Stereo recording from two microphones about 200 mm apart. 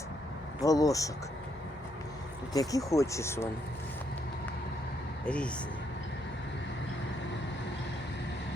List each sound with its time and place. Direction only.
0.6 s speech: 15° left (ahead or behind)
2.5 s speech: 15° left (ahead or behind)
5.2 s speech: 5° left (ahead or behind)